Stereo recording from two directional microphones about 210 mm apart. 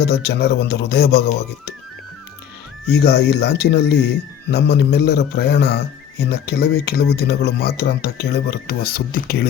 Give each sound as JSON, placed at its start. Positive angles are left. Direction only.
{"t": 0.0, "sound": "speech", "side_deg": 50}
{"t": 2.8, "sound": "speech", "side_deg": 50}